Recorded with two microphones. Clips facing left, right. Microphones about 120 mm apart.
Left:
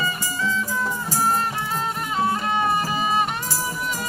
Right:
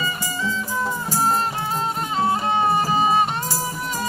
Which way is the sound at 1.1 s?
25° right (ahead or behind).